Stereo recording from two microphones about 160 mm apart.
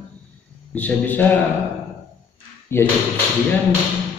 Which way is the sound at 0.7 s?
10° left (ahead or behind).